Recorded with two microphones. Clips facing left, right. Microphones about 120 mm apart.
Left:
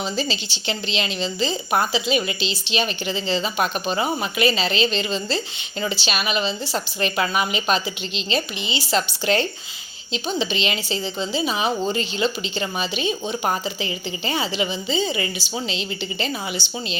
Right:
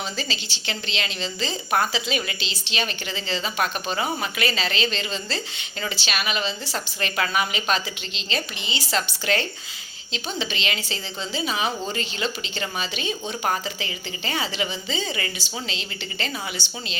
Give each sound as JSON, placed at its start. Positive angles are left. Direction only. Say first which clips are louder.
{"t": 0.0, "sound": "a woman's voice", "louder": "left 5 dB", "side_deg": 20}